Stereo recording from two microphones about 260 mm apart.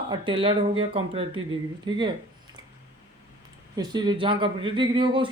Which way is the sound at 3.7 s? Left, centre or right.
Centre.